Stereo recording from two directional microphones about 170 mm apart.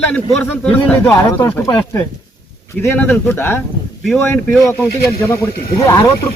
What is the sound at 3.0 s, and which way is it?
Speech, 10° left (ahead or behind).